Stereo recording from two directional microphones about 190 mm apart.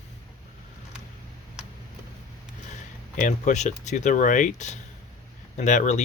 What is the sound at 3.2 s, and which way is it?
Speech, 40° left (ahead or behind).